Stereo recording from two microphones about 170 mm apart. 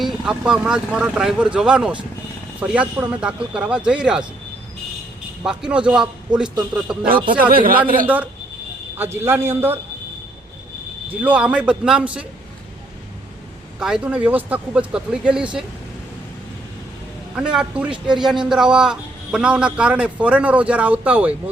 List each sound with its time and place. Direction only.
0.0 s speech: 5° right (ahead or behind)
3.0 s speech: 5° right (ahead or behind)
5.5 s speech: 5° right (ahead or behind)
7.5 s speech: 55° right (ahead or behind)
8.0 s speech: 10° right (ahead or behind)
11.1 s speech: 10° right (ahead or behind)
13.7 s speech: 5° right (ahead or behind)
17.3 s speech: 5° right (ahead or behind)